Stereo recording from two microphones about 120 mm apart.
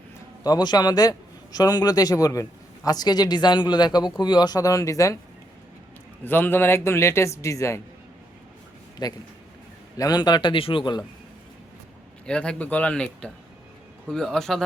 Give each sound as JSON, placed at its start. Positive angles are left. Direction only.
{"t": 0.4, "sound": "a man's voice", "side_deg": 35}
{"t": 6.2, "sound": "a man's voice", "side_deg": 15}
{"t": 9.0, "sound": "a man's voice", "side_deg": 35}
{"t": 12.2, "sound": "speech", "side_deg": 10}